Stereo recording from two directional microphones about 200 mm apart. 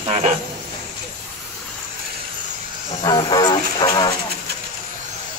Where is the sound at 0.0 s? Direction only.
30° right (ahead or behind).